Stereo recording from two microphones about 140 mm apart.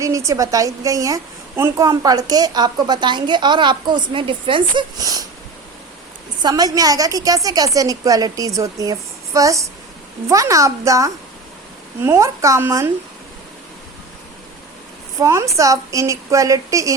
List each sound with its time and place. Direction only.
0.0 s a woman's voice: 25° right (ahead or behind)
6.4 s a woman's voice: 25° right (ahead or behind)
15.2 s a woman's voice: 20° right (ahead or behind)